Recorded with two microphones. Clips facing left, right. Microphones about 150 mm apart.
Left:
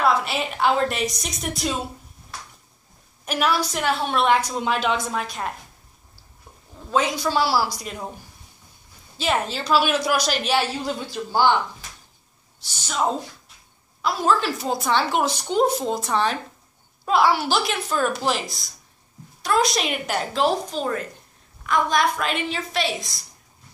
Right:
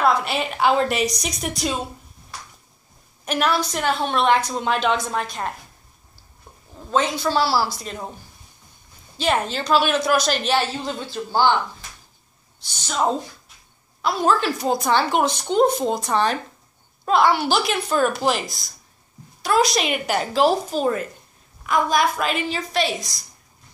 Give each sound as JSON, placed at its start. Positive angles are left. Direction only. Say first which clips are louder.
{"t": 0.0, "sound": "a woman's voice", "louder": "right 1 dB", "side_deg": 0}
{"t": 3.3, "sound": "a woman's voice", "louder": "right 1 dB", "side_deg": 5}
{"t": 6.9, "sound": "a man's voice", "louder": "right 1 dB", "side_deg": 5}
{"t": 9.2, "sound": "a woman's voice", "louder": "right 2 dB", "side_deg": 5}
{"t": 14.0, "sound": "a woman's voice", "louder": "right 1 dB", "side_deg": 0}